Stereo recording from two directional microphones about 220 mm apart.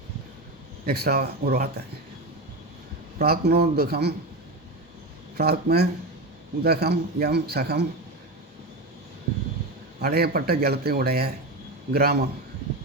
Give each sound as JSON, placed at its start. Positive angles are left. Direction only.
{"t": 0.9, "sound": "a man's voice", "side_deg": -45}
{"t": 3.2, "sound": "a man's voice", "side_deg": -45}
{"t": 5.4, "sound": "a man's voice", "side_deg": -45}
{"t": 10.0, "sound": "a man's voice", "side_deg": -45}